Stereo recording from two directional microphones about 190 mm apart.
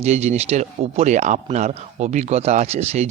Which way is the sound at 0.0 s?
35° right (ahead or behind).